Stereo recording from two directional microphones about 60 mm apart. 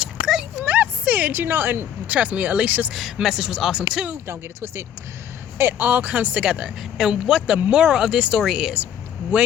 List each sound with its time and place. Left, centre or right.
0.0 s a sound: centre
0.6 s a sound: right
2.0 s speech: right
2.9 s speech: centre
4.3 s speech: right
5.5 s speech: right; by 6.7 s centre
6.9 s speech: centre
9.3 s speech: right